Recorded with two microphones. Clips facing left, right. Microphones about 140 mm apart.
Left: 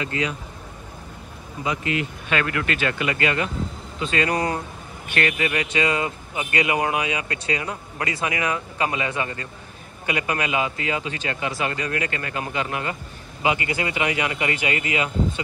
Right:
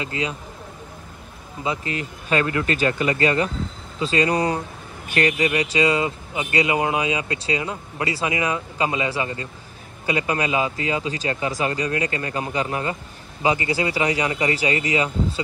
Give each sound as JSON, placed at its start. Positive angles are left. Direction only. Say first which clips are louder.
{"t": 0.0, "sound": "speech", "louder": "left 1 dB", "side_deg": -25}
{"t": 1.6, "sound": "speech", "louder": "left 1 dB", "side_deg": -30}